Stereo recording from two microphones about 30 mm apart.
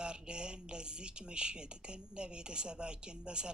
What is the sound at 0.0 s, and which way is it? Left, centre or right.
Speech, right.